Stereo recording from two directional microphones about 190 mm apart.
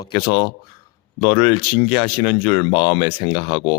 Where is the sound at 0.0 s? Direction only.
20° left (ahead or behind).